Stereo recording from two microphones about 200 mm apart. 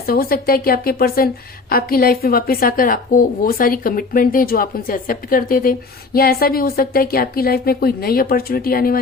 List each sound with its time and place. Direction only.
0.0 s a woman's voice: 50° left (ahead or behind)